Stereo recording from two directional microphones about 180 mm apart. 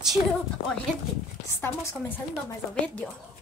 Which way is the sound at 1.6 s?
10° left (ahead or behind).